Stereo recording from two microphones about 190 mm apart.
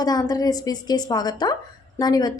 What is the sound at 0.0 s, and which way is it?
A woman's voice, 20° left (ahead or behind).